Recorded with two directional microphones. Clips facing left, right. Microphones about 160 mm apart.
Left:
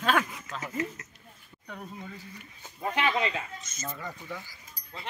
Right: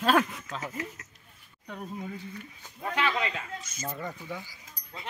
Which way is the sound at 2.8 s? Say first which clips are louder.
Left 1 dB; 25° left (ahead or behind).